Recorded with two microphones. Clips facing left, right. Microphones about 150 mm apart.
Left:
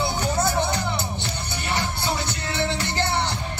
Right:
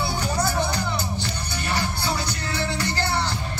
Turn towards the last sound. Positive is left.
turn(degrees=20)  # may be behind; listen again after turning